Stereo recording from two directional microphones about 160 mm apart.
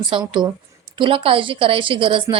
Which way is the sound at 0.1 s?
30° right (ahead or behind).